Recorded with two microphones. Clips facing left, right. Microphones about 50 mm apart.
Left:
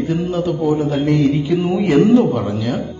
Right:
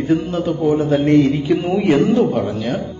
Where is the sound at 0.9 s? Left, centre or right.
Right.